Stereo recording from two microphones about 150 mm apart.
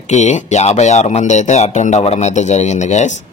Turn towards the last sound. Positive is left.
turn(degrees=50)  # may be behind; listen again after turning